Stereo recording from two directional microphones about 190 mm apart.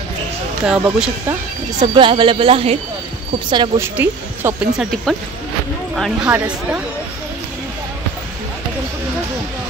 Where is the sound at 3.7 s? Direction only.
10° right (ahead or behind).